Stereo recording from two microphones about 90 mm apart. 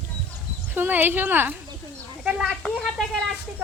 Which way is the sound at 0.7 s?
20° right (ahead or behind).